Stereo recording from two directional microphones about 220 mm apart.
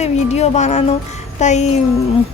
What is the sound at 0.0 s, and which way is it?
A woman's voice, 30° left (ahead or behind).